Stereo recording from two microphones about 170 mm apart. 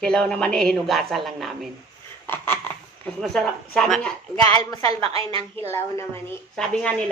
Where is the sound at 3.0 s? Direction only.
Centre (ahead or behind).